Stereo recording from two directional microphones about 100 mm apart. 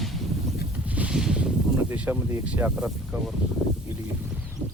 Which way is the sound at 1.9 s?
15° right (ahead or behind).